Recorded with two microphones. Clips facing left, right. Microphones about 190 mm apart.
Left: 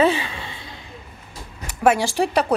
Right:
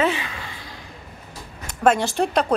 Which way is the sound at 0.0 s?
30° left (ahead or behind).